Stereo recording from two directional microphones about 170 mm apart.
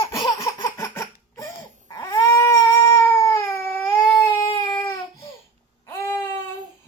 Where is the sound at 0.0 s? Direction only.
25° left (ahead or behind).